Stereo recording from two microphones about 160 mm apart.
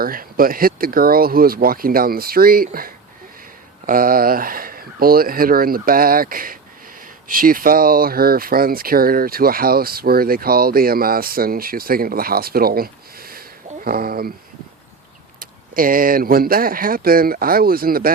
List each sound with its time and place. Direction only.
0.0 s speech: 65° right (ahead or behind)
15.4 s speech: 60° right (ahead or behind)